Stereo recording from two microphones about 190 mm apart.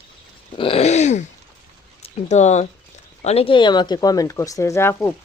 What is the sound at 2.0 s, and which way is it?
Speech, 35° left (ahead or behind).